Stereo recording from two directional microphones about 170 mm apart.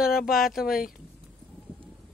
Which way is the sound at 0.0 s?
60° left (ahead or behind).